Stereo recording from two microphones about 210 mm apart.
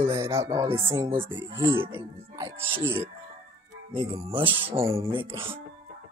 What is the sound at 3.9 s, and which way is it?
Speech, 25° right (ahead or behind).